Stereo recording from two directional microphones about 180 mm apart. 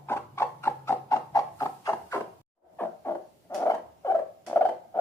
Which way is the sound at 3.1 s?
15° left (ahead or behind).